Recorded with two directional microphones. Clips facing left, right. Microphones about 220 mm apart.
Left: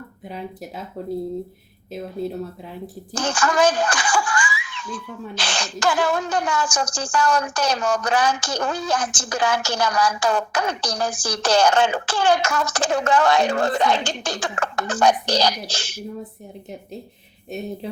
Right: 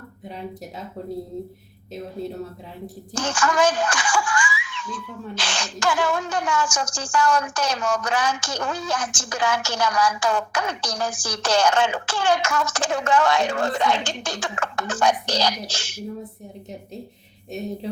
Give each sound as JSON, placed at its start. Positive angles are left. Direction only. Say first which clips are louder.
{"t": 3.1, "sound": "speech", "louder": "left 1 dB", "side_deg": 35}
{"t": 17.5, "sound": "music", "louder": "left 1 dB", "side_deg": 0}